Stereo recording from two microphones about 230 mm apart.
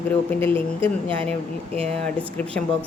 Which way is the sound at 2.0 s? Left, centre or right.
Centre.